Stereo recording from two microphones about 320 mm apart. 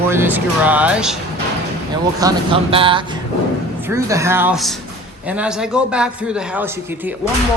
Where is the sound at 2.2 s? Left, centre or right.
Centre.